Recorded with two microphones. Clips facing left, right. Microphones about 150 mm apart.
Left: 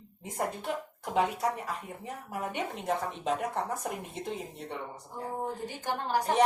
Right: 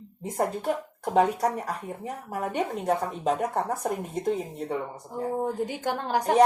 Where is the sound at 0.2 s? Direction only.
40° right (ahead or behind).